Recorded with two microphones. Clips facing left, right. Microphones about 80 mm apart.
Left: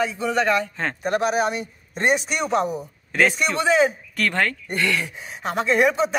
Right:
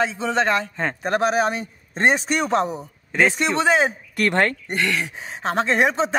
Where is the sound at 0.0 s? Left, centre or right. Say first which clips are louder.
Right 1 dB; right.